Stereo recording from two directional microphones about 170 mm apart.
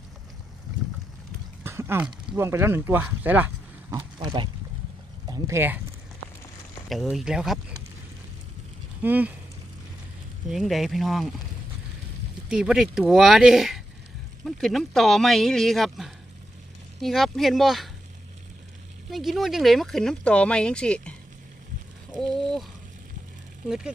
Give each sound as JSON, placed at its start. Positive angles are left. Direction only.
{"t": 1.6, "sound": "speech", "side_deg": -15}
{"t": 3.9, "sound": "speech", "side_deg": -25}
{"t": 5.3, "sound": "speech", "side_deg": -15}
{"t": 6.8, "sound": "speech", "side_deg": 0}
{"t": 9.0, "sound": "speech", "side_deg": -10}
{"t": 10.5, "sound": "speech", "side_deg": 0}
{"t": 12.5, "sound": "speech", "side_deg": -5}
{"t": 19.1, "sound": "speech", "side_deg": 0}
{"t": 23.6, "sound": "speech", "side_deg": -5}